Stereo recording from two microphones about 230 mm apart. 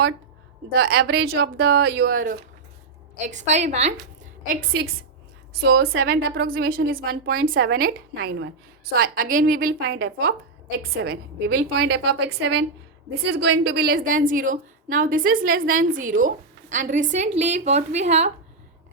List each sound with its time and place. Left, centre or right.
0.8 s a woman's voice: right
5.6 s a woman's voice: right
13.3 s a woman's voice: right